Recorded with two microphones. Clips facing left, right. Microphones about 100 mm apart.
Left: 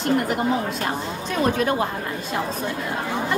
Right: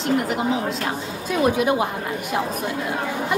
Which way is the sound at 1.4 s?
15° right (ahead or behind).